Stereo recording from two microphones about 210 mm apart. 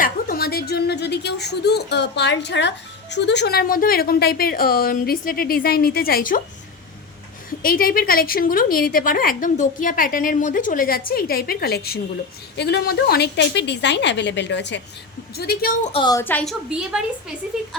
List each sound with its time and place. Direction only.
0.0 s a woman's voice: 45° left (ahead or behind)
7.6 s a woman's voice: 45° left (ahead or behind)
15.4 s a woman's voice: 45° left (ahead or behind)
15.9 s a woman's voice: 20° left (ahead or behind); by 17.3 s 5° right (ahead or behind)